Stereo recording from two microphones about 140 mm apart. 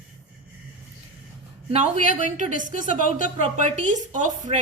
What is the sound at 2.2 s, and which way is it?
A woman's voice, 65° right (ahead or behind).